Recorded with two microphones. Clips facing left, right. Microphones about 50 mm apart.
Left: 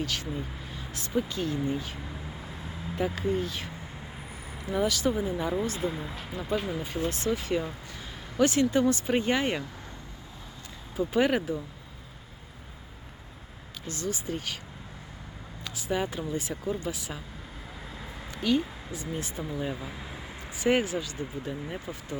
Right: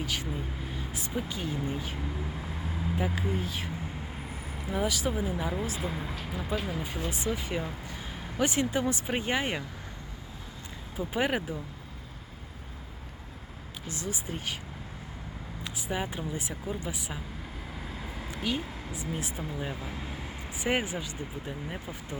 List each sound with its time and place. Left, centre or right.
0.0 s speech: centre
10.9 s speech: centre
13.8 s speech: centre
15.6 s speech: centre
17.8 s a sound: centre
18.9 s speech: centre